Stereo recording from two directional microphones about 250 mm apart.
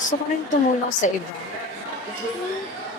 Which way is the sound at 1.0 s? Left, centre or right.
Left.